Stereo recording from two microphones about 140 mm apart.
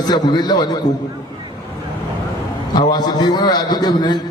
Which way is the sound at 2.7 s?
30° left (ahead or behind).